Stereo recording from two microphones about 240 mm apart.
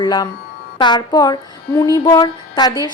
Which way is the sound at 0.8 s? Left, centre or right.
Centre.